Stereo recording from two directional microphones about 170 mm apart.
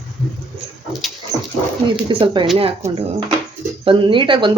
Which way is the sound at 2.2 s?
25° right (ahead or behind).